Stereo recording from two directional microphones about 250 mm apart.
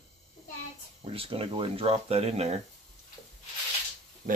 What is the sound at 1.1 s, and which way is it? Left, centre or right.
Speech, right.